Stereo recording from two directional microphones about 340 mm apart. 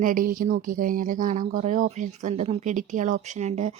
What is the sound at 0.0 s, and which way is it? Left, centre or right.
Speech, right.